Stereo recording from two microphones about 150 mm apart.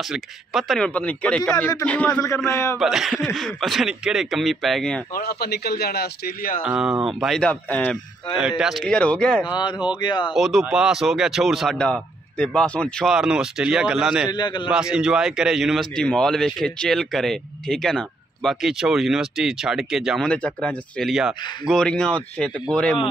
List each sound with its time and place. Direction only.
0.1 s a man's voice: centre (ahead or behind)
2.1 s a man's voice: 20° left (ahead or behind)
2.8 s speech: 5° right (ahead or behind)
5.1 s a man's voice: 90° left
6.6 s speech: 5° right (ahead or behind)
8.4 s speech: 5° right (ahead or behind)
9.5 s a man's voice: 30° left (ahead or behind)
10.3 s speech: centre (ahead or behind)
14.3 s a man's voice: 30° left (ahead or behind)
14.7 s speech: 5° right (ahead or behind)